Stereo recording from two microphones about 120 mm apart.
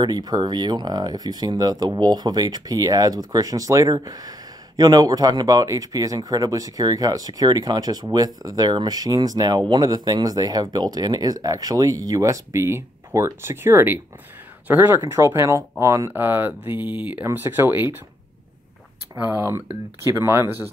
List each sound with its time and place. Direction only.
0.0 s speech: 35° right (ahead or behind); by 17.9 s 20° right (ahead or behind)
19.3 s speech: 20° right (ahead or behind)